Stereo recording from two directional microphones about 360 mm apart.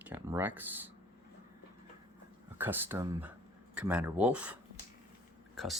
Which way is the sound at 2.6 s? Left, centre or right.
Centre.